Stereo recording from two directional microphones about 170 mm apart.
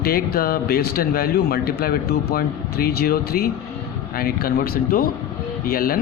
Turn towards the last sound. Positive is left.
turn(degrees=60)  # may be behind; listen again after turning